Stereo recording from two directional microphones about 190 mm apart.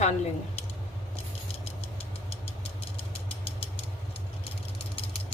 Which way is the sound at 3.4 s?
30° left (ahead or behind).